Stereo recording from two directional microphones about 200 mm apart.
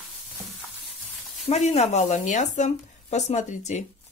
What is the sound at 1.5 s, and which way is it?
Speech, 35° left (ahead or behind).